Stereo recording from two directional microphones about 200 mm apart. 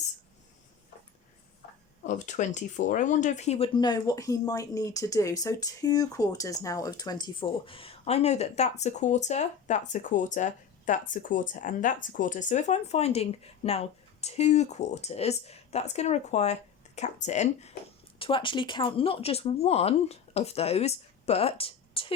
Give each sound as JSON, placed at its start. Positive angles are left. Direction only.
{"t": 2.0, "sound": "speech", "side_deg": 40}
{"t": 3.8, "sound": "speech", "side_deg": 20}